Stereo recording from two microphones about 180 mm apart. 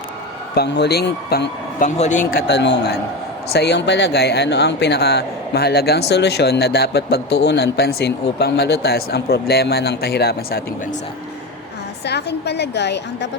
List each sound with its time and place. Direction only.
0.5 s speech: 65° left (ahead or behind)
1.8 s a man's voice: 45° left (ahead or behind)
2.5 s a woman's voice: 70° left (ahead or behind)
12.0 s a woman's voice: 70° left (ahead or behind)